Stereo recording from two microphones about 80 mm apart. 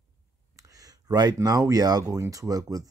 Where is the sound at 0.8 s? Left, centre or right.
Right.